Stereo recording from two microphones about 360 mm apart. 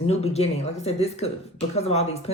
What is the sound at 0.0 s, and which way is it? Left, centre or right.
A man's voice, centre.